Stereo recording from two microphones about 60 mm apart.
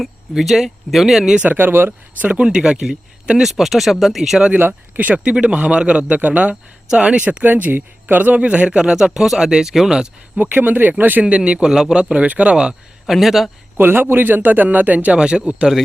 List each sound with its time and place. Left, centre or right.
0.0 s speech: centre
1.5 s speech: right
2.3 s speech: centre
4.5 s a man's voice: right; by 10.1 s centre
10.3 s speech: right; by 12.0 s centre
12.0 s a man's voice: right
13.1 s speech: centre
13.7 s a man's voice: right